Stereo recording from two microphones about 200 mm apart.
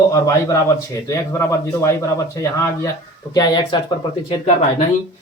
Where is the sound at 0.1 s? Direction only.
15° left (ahead or behind).